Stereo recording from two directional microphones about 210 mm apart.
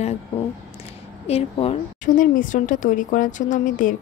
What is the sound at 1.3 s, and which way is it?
Speech, 25° left (ahead or behind).